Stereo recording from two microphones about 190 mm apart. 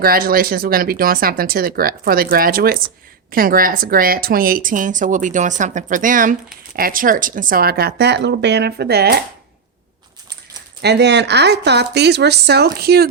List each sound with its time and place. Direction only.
0.0 s a woman's voice: 50° right (ahead or behind)
10.8 s speech: 60° right (ahead or behind)